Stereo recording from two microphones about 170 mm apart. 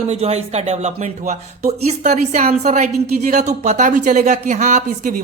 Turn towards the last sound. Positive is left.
turn(degrees=-50)  # may be behind; listen again after turning